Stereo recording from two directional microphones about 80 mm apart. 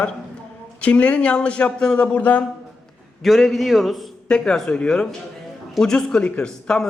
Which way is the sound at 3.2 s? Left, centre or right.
Centre.